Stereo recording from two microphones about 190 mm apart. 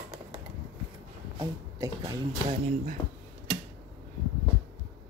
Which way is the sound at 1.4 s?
15° right (ahead or behind).